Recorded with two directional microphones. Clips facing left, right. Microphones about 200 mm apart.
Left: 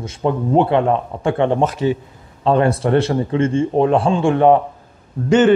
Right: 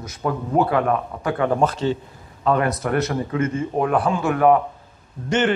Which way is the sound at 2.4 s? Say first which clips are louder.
Left 5 dB; 30° left (ahead or behind).